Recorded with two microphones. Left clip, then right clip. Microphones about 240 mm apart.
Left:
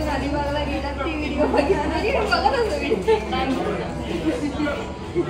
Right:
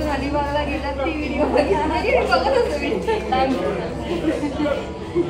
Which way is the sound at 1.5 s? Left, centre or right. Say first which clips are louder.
Right 4 dB; centre.